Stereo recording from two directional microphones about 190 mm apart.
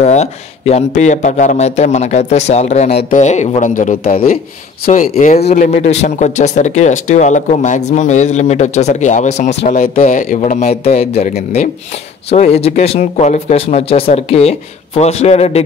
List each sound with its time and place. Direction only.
0.0 s speech: 35° left (ahead or behind)